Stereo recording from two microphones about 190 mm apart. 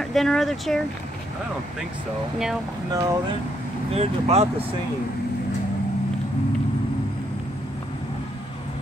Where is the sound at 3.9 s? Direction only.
35° right (ahead or behind).